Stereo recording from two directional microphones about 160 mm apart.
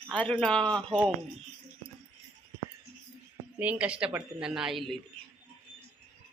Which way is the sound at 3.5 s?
10° right (ahead or behind).